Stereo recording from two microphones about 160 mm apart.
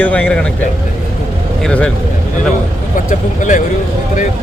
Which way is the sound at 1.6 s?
5° left (ahead or behind).